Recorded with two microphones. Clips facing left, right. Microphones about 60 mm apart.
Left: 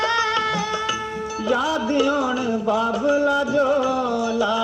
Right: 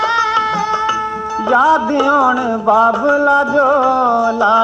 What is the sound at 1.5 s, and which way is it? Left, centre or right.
Music, right.